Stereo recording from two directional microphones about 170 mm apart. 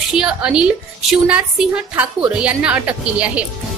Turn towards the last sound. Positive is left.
turn(degrees=-5)  # may be behind; listen again after turning